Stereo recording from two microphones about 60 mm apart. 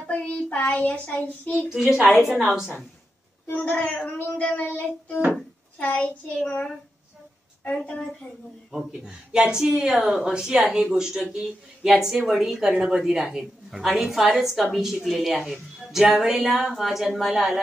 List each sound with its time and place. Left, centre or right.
0.0 s a child's voice: left
1.7 s a woman's voice: centre
3.5 s a child's voice: left
4.6 s child singing: left
5.8 s a child's voice: left
8.7 s a woman's voice: centre